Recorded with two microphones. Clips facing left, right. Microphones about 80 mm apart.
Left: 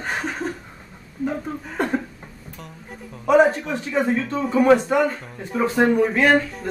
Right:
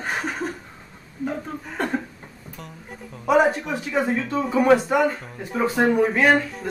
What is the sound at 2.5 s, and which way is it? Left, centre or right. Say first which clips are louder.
Speech: even; centre.